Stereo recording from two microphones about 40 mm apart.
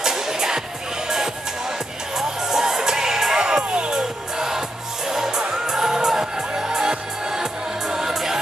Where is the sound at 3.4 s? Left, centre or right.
Right.